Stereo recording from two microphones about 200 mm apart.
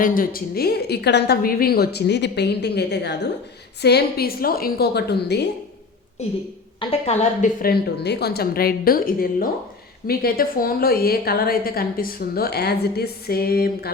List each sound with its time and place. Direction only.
0.0 s a woman's voice: 45° left (ahead or behind)
6.7 s a woman's voice: 30° left (ahead or behind)
7.6 s a woman's voice: 50° left (ahead or behind)